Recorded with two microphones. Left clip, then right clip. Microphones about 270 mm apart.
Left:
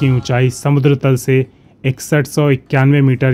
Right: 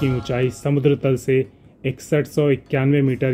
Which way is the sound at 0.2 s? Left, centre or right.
Left.